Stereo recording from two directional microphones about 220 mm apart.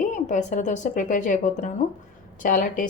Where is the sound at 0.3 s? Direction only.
35° left (ahead or behind).